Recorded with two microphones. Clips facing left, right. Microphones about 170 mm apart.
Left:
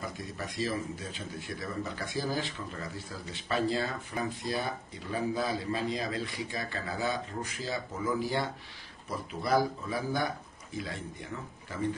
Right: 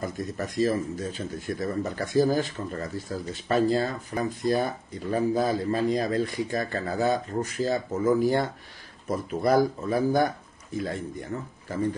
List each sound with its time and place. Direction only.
0.0 s speech: 45° right (ahead or behind)